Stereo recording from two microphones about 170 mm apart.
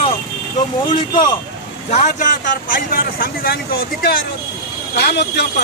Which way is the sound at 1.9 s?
45° left (ahead or behind).